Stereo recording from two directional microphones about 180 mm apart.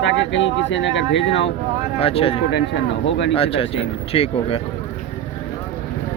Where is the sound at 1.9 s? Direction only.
30° left (ahead or behind).